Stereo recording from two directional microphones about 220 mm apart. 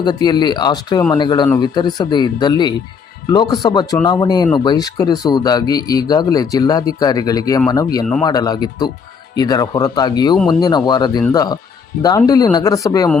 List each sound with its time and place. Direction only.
0.0 s speech: 20° left (ahead or behind)
10.3 s speech: centre (ahead or behind)
10.6 s speech: 20° left (ahead or behind)